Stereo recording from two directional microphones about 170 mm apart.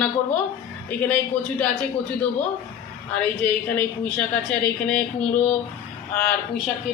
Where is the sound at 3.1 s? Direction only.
10° left (ahead or behind).